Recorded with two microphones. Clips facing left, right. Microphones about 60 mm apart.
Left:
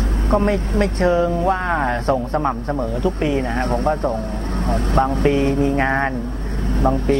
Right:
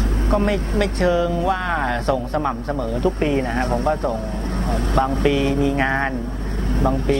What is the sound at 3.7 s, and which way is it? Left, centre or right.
Speech, left.